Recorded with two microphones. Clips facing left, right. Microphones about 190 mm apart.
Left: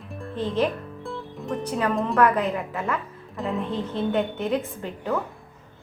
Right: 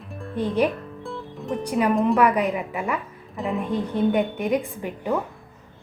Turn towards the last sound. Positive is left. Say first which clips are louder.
# right 2 dB
turn(degrees=-15)  # may be behind; listen again after turning